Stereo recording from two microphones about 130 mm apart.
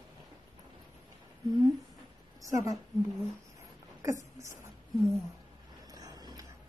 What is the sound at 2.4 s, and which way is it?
Speech, 25° right (ahead or behind).